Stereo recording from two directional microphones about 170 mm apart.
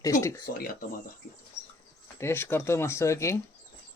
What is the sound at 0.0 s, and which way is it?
Speech, 20° left (ahead or behind).